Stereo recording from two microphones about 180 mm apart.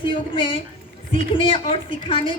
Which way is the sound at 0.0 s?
30° left (ahead or behind).